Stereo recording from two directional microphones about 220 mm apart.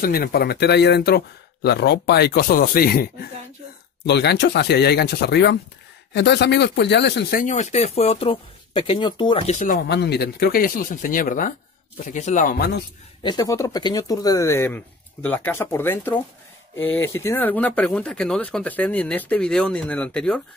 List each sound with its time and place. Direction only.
0.0 s speech: 45° left (ahead or behind)
9.8 s speech: 50° left (ahead or behind)
13.2 s speech: 20° left (ahead or behind)